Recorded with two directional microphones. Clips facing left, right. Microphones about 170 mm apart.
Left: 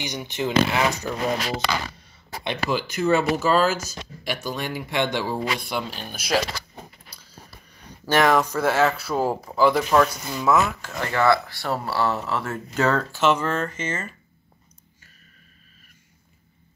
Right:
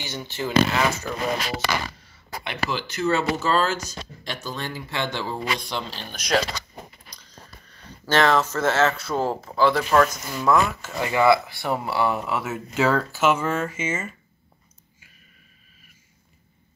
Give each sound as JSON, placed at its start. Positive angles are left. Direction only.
{"t": 0.0, "sound": "speech", "side_deg": 15}
{"t": 2.4, "sound": "speech", "side_deg": 20}